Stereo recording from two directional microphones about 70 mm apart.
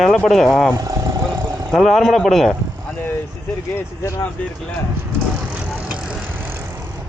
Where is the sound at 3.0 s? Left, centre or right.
Left.